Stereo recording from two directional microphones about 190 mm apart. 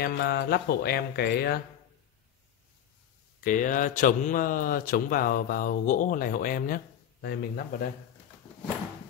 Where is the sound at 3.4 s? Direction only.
45° left (ahead or behind).